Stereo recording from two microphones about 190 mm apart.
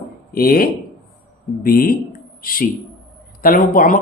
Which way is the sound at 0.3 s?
50° left (ahead or behind).